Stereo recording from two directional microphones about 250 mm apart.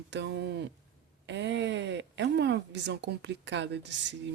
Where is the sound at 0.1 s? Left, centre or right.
Right.